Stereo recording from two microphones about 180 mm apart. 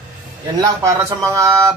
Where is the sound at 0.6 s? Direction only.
15° right (ahead or behind).